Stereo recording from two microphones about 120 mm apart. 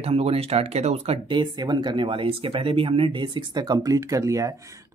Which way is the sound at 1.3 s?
40° right (ahead or behind).